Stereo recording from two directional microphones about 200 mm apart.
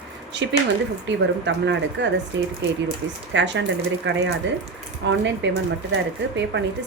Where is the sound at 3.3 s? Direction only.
65° right (ahead or behind).